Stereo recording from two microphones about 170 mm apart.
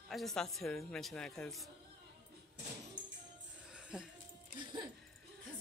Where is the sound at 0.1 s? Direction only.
Centre (ahead or behind).